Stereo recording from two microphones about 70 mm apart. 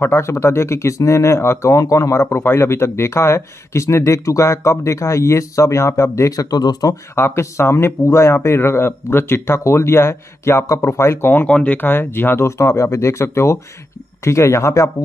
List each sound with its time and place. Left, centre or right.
0.0 s speech: left
6.4 s speech: left
7.2 s speech: left
11.4 s speech: centre
11.7 s speech: left